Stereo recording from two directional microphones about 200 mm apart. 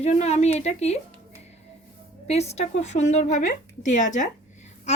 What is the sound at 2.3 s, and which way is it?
A woman's voice, 30° left (ahead or behind).